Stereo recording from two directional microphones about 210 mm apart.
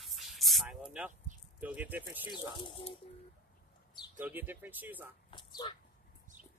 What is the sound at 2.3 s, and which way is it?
Speech, 20° left (ahead or behind).